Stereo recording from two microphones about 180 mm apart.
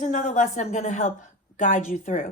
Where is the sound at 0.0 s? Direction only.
45° left (ahead or behind).